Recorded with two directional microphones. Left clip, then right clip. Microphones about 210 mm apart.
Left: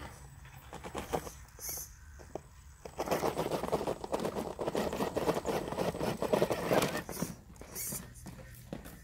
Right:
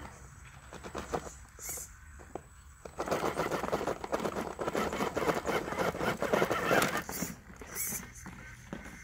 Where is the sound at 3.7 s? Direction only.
Centre (ahead or behind).